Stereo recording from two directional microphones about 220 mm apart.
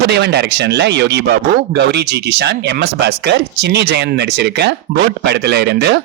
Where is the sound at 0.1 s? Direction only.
50° right (ahead or behind).